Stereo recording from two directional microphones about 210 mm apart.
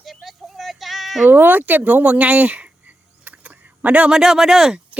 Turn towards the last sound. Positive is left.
turn(degrees=0)  # may be behind; listen again after turning